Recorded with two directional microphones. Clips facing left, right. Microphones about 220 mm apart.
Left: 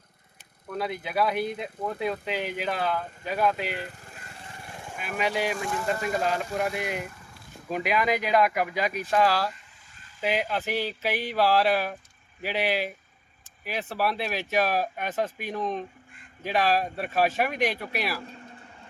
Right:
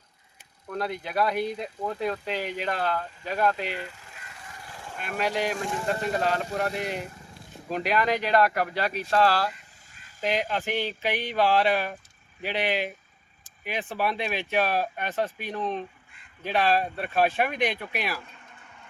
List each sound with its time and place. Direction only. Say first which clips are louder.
0.7 s speech: even; 5° left (ahead or behind)
3.8 s vehicle: left 2 dB; 50° left (ahead or behind)
4.2 s vehicle: left 1 dB; 30° left (ahead or behind)
4.9 s speech: even; 5° left (ahead or behind)
6.7 s speech: even; 35° right (ahead or behind)
7.7 s speech: even; 10° left (ahead or behind)
13.9 s speech: even; 5° left (ahead or behind)
18.3 s vehicle: left 7 dB; 35° left (ahead or behind)